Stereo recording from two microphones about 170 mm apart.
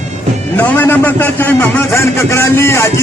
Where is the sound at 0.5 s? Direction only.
10° left (ahead or behind).